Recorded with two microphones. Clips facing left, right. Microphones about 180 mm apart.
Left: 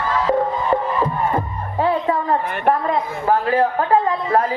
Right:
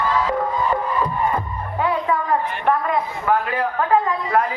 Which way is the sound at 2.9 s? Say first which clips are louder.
Left 2 dB; 35° left (ahead or behind).